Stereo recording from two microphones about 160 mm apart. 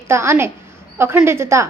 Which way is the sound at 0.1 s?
15° right (ahead or behind).